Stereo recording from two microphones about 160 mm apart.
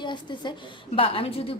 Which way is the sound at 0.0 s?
30° left (ahead or behind).